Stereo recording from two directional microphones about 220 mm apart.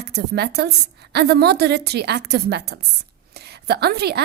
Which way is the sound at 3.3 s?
45° right (ahead or behind).